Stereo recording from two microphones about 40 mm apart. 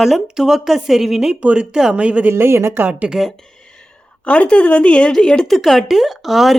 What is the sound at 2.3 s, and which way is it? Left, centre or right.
Speech, right.